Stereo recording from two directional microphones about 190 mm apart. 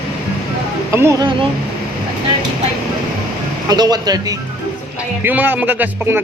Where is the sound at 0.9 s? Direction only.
15° right (ahead or behind).